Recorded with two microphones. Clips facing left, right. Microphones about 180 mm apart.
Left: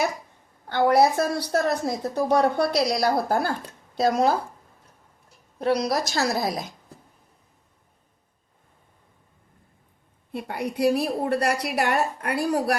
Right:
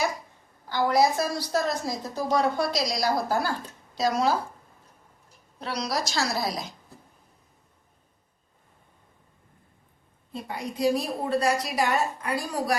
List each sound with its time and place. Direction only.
0.7 s a woman's voice: 60° left (ahead or behind)
5.5 s a woman's voice: 50° left (ahead or behind)
10.3 s a woman's voice: 65° left (ahead or behind)